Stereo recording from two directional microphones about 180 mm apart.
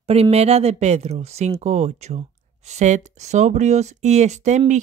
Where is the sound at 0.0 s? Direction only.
35° right (ahead or behind).